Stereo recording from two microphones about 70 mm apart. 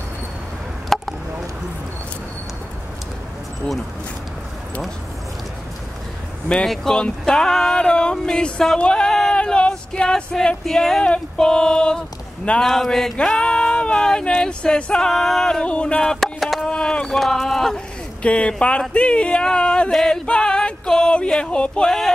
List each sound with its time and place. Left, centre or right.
0.9 s chop: centre
6.5 s speech: centre
16.0 s a sound: centre
16.7 s run: centre
18.2 s speech: centre
20.0 s a sound: centre